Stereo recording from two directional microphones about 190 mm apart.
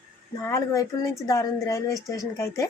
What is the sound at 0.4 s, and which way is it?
A woman's voice, 15° left (ahead or behind).